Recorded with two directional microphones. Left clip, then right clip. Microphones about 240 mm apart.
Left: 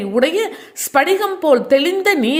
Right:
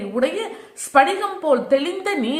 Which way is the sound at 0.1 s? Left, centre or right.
Left.